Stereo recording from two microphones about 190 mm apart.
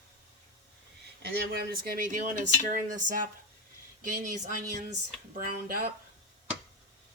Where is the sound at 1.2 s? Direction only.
55° right (ahead or behind).